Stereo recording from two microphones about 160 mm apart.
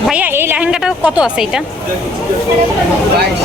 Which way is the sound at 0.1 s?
10° right (ahead or behind).